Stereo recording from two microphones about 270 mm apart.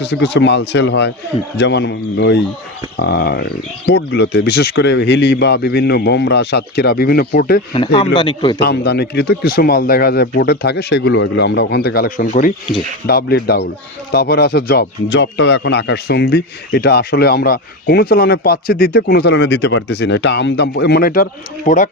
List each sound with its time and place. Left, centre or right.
0.0 s speech: left
7.7 s speech: centre
8.5 s speech: left